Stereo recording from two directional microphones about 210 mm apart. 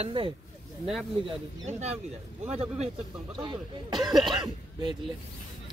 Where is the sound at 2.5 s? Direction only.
30° right (ahead or behind).